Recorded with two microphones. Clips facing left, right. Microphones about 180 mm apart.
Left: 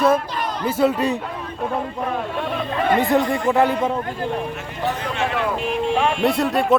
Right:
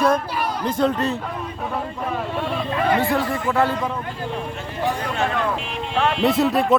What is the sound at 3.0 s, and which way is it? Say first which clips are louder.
Speech: left 3 dB; 20° left (ahead or behind).